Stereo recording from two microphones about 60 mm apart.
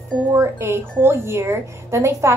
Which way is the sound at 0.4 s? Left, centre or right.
Right.